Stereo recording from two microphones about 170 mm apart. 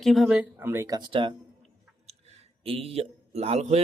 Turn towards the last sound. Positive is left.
turn(degrees=-40)  # may be behind; listen again after turning